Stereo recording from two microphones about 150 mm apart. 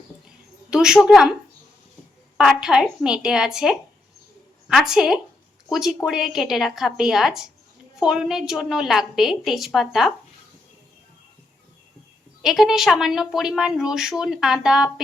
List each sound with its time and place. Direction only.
0.7 s a woman's voice: 5° right (ahead or behind)
2.4 s a woman's voice: 5° right (ahead or behind)
12.4 s a woman's voice: centre (ahead or behind)